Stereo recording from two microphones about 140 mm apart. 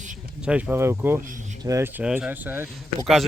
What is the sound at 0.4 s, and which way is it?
Speech, 10° right (ahead or behind).